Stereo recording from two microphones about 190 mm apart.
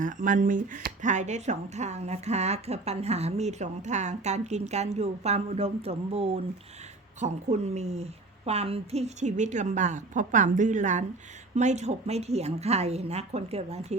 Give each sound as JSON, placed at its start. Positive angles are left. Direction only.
{"t": 0.0, "sound": "speech", "side_deg": -45}